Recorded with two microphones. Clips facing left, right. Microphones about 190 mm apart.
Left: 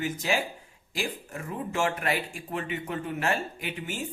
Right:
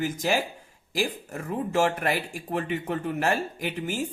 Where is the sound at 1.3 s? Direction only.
45° right (ahead or behind).